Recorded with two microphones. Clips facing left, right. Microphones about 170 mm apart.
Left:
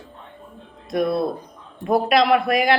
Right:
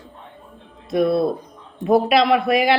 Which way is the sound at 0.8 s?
Centre (ahead or behind).